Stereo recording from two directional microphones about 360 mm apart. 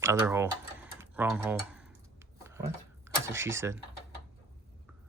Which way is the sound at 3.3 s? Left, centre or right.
Centre.